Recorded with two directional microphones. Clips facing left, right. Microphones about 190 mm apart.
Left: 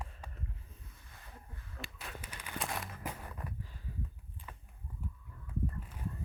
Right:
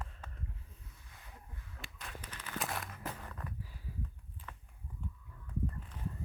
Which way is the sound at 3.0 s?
10° left (ahead or behind).